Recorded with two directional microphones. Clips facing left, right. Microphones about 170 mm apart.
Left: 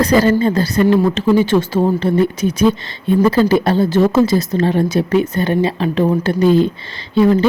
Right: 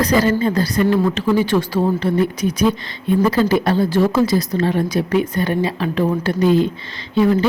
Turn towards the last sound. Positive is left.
turn(degrees=30)  # may be behind; listen again after turning